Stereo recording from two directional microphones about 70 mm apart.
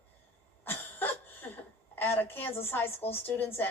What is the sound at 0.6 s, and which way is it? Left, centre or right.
Cough, left.